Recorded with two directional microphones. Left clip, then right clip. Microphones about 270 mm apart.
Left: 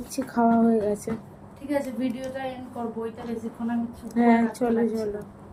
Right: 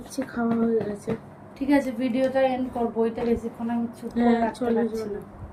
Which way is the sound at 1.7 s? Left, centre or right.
Right.